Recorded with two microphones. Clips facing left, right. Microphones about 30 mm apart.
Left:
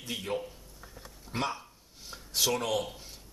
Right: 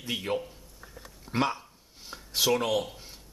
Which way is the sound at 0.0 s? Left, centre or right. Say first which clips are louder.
Right 3 dB; centre.